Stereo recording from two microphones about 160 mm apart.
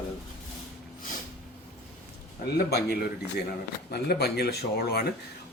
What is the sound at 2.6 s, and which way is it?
Speech, 85° left.